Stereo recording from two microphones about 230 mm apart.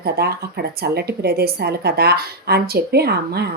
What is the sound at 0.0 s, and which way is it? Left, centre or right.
Speech, right.